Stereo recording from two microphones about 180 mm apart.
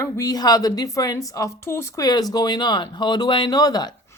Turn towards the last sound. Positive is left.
turn(degrees=20)  # may be behind; listen again after turning